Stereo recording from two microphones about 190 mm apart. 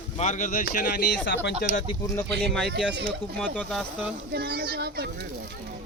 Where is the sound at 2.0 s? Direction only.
10° left (ahead or behind).